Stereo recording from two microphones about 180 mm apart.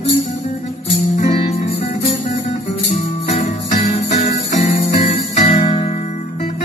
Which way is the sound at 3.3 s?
40° left (ahead or behind).